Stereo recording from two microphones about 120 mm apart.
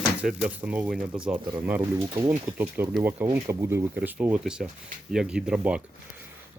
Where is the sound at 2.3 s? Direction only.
15° right (ahead or behind).